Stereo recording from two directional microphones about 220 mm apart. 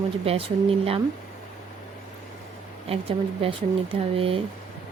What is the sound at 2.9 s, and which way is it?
Speech, 25° right (ahead or behind).